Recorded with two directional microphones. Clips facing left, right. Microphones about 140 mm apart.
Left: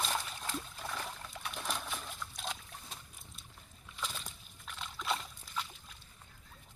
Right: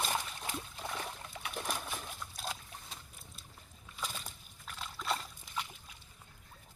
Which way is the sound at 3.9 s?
5° right (ahead or behind).